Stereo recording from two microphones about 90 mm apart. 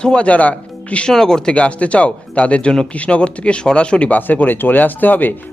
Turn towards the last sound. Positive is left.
turn(degrees=20)  # may be behind; listen again after turning